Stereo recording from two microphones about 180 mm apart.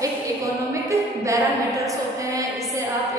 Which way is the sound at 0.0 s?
15° right (ahead or behind).